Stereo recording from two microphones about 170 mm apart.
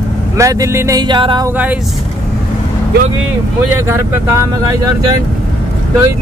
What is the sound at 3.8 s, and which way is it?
Speech, 15° right (ahead or behind).